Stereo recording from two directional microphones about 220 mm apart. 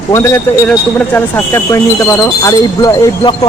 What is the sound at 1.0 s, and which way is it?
Speech, 10° left (ahead or behind).